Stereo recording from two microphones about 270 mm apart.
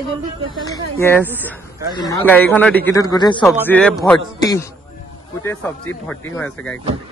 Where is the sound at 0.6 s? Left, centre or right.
Centre.